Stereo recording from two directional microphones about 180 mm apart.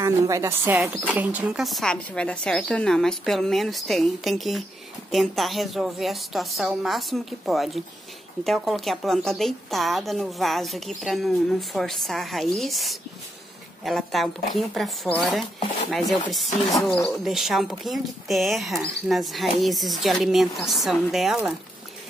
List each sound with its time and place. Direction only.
0.0 s a woman's voice: 15° right (ahead or behind)